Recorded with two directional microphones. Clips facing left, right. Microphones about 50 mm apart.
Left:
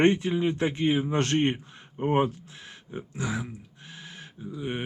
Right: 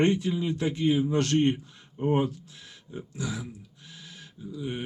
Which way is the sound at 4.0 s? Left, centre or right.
Left.